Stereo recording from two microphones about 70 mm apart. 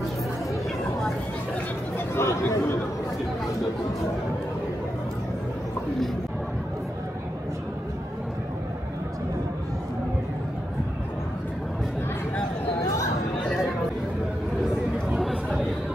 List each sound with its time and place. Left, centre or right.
2.1 s chatter: left